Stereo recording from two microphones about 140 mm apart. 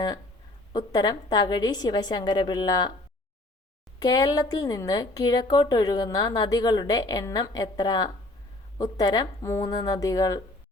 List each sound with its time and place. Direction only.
0.7 s a woman's voice: 25° left (ahead or behind)
4.0 s a woman's voice: 30° left (ahead or behind)